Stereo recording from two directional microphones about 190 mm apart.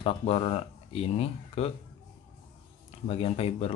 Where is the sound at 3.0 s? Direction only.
35° left (ahead or behind).